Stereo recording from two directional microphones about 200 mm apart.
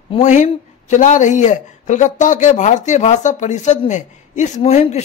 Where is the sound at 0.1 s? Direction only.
35° left (ahead or behind).